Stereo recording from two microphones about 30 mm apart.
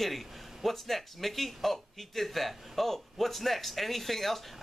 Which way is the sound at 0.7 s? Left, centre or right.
Centre.